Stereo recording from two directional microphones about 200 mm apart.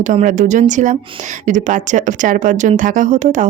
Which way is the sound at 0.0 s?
40° right (ahead or behind).